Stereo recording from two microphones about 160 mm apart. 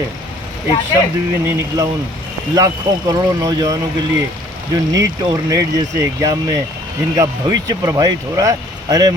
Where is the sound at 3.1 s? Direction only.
20° right (ahead or behind).